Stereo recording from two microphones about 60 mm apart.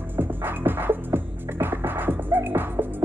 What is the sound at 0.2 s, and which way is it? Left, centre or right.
Music, right.